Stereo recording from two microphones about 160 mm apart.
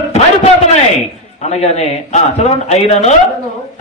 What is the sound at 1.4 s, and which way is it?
Speech, 40° left (ahead or behind).